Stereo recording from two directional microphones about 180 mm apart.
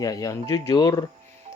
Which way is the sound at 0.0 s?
20° left (ahead or behind).